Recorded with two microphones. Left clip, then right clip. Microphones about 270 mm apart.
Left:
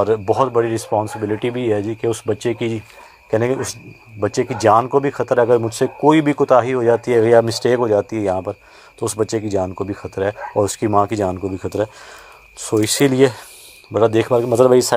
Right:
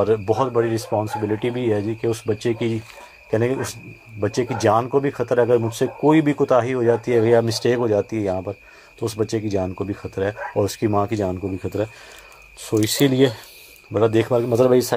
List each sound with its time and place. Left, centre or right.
0.0 s speech: left